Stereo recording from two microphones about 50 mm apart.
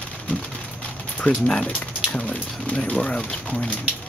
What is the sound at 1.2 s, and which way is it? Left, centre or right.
Speech, centre.